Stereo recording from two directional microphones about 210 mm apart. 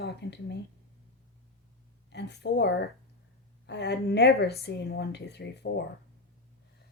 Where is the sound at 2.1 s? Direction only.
55° left (ahead or behind).